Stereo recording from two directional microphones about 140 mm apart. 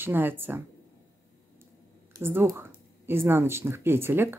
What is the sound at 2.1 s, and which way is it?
Speech, 20° right (ahead or behind).